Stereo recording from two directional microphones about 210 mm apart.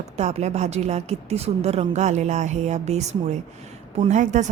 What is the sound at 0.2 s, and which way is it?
A woman's voice, 30° right (ahead or behind).